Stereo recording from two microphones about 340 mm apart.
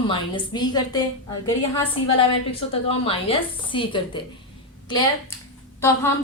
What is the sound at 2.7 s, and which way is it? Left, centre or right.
A woman's voice, centre.